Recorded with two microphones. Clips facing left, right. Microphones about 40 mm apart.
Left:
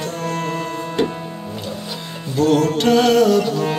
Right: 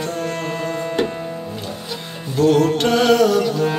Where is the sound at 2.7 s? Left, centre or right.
Right.